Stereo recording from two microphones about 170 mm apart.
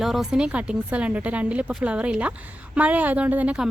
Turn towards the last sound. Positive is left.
turn(degrees=-10)  # may be behind; listen again after turning